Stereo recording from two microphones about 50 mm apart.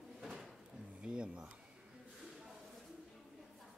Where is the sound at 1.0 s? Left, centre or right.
Centre.